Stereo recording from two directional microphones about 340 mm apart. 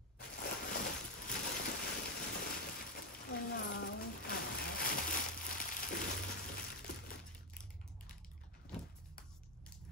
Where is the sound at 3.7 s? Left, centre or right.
Left.